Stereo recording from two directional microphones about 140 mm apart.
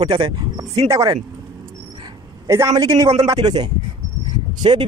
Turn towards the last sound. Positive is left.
turn(degrees=-35)  # may be behind; listen again after turning